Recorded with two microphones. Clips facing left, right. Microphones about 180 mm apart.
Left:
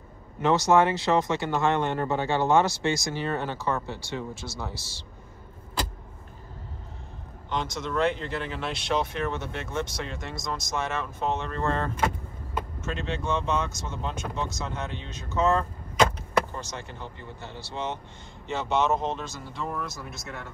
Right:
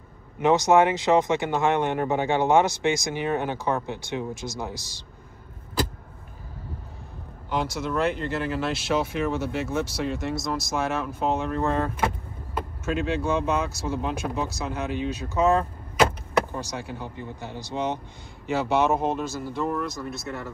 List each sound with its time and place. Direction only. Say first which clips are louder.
0.4 s speech: right 2 dB; 15° right (ahead or behind)
7.4 s speech: right 3 dB; 5° right (ahead or behind)